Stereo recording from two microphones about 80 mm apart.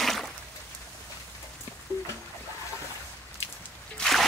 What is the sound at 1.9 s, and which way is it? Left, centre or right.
Music, left.